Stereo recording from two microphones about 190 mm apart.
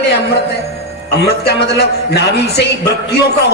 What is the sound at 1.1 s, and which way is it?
A man's voice, 60° left (ahead or behind).